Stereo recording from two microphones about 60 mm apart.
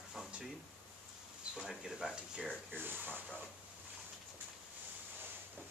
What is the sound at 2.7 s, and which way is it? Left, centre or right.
Speech, right.